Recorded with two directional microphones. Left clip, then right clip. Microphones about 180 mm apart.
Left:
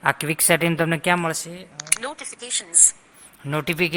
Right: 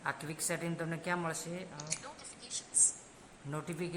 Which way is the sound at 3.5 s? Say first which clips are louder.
Left 18 dB; 30° left (ahead or behind).